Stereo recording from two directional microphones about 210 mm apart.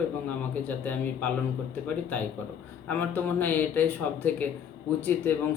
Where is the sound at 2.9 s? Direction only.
10° left (ahead or behind).